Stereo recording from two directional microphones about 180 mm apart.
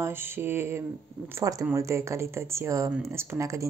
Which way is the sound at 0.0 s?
15° right (ahead or behind).